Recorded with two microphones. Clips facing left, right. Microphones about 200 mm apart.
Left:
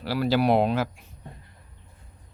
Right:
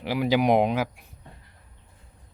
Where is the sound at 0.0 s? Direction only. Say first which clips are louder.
Even; 15° right (ahead or behind).